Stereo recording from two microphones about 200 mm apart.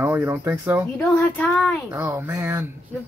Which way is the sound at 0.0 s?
10° right (ahead or behind).